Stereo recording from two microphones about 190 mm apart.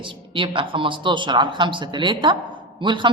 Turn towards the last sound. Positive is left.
turn(degrees=-25)  # may be behind; listen again after turning